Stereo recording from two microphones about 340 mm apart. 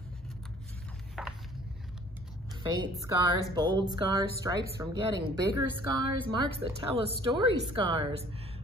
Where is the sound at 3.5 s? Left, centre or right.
Centre.